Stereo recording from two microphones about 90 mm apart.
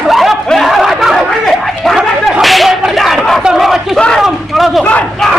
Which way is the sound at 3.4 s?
5° right (ahead or behind).